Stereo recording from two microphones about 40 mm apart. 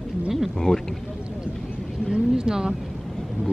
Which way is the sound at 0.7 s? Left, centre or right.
Left.